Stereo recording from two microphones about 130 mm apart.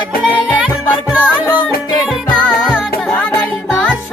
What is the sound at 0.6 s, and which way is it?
Music, 5° right (ahead or behind).